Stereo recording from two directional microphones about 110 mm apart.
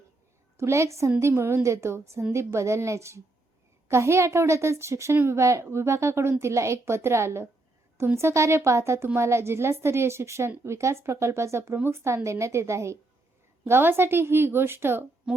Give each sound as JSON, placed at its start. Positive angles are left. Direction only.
{"t": 0.5, "sound": "a woman's voice", "side_deg": -25}
{"t": 15.3, "sound": "speech", "side_deg": -5}